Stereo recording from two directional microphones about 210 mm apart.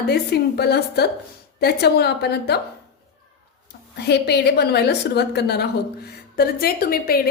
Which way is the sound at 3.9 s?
50° left (ahead or behind).